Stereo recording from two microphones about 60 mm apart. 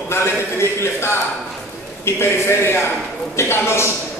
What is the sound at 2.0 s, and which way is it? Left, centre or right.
Speech, left.